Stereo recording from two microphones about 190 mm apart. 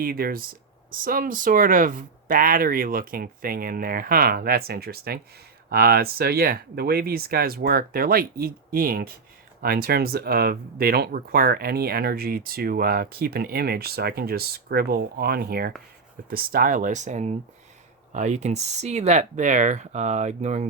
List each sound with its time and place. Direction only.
0.0 s speech: 50° right (ahead or behind)